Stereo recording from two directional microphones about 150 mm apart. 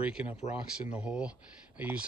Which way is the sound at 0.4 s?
50° left (ahead or behind).